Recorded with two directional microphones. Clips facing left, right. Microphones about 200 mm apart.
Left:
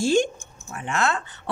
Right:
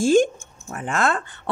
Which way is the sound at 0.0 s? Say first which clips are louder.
Right 4 dB; 50° right (ahead or behind).